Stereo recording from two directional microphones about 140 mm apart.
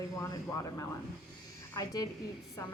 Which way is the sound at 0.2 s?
25° left (ahead or behind).